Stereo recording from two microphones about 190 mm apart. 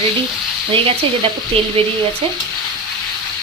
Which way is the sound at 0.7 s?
30° right (ahead or behind).